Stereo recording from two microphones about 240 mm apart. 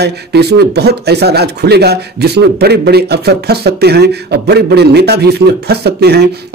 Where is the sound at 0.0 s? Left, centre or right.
Right.